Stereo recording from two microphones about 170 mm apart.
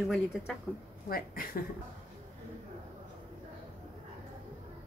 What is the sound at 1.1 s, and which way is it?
Speech, 60° left (ahead or behind).